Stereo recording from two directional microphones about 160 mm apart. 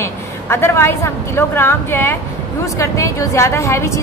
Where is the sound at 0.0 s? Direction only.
15° left (ahead or behind).